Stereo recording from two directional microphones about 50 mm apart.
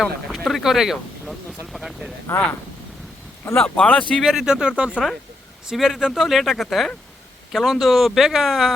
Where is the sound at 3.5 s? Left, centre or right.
Left.